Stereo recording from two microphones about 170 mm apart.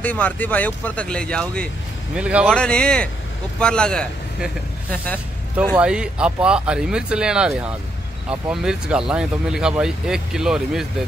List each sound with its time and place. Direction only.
0.0 s speech: 10° left (ahead or behind)
2.1 s speech: 5° right (ahead or behind)
2.4 s a man's voice: 5° left (ahead or behind)
5.6 s speech: 5° right (ahead or behind)